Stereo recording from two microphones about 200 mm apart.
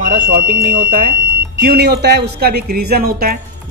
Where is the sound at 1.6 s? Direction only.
55° right (ahead or behind).